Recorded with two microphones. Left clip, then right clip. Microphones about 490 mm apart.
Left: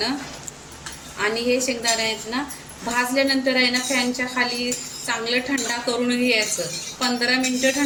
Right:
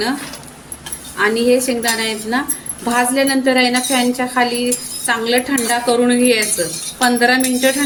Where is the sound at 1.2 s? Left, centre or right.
Left.